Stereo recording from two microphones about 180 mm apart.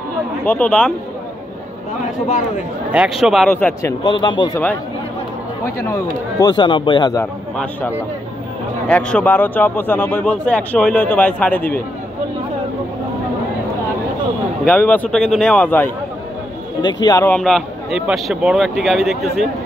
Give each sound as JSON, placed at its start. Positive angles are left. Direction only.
{"t": 0.5, "sound": "speech", "side_deg": 10}
{"t": 2.9, "sound": "speech", "side_deg": -5}
{"t": 3.5, "sound": "speech", "side_deg": 10}
{"t": 4.0, "sound": "speech", "side_deg": 25}
{"t": 5.8, "sound": "speech", "side_deg": 15}
{"t": 8.8, "sound": "speech", "side_deg": 5}
{"t": 14.6, "sound": "speech", "side_deg": 10}
{"t": 16.8, "sound": "speech", "side_deg": 20}
{"t": 17.3, "sound": "speech", "side_deg": 0}